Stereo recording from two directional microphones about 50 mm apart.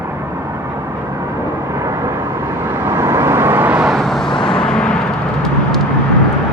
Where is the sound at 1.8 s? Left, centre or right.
Right.